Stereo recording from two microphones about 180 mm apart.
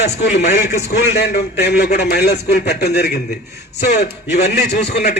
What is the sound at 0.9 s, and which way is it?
A man's voice, 65° left (ahead or behind).